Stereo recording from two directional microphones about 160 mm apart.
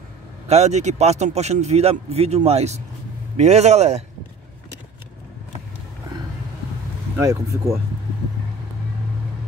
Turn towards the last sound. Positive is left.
turn(degrees=-20)  # may be behind; listen again after turning